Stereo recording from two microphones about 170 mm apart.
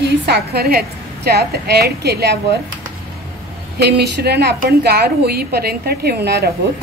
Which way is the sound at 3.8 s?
75° right (ahead or behind).